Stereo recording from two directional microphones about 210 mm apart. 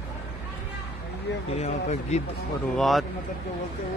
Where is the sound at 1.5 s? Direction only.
30° left (ahead or behind).